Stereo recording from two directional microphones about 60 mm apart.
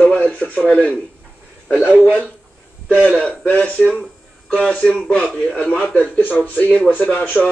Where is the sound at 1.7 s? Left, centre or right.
Right.